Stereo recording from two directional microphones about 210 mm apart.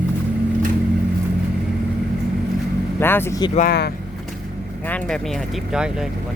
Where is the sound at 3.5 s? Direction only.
45° left (ahead or behind).